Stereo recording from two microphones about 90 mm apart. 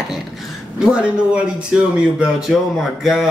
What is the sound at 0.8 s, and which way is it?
A man's voice, 10° right (ahead or behind).